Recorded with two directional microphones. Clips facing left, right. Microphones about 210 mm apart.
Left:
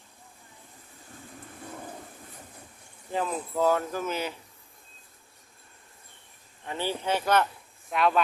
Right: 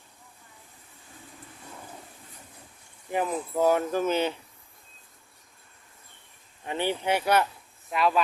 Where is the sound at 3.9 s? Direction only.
25° right (ahead or behind).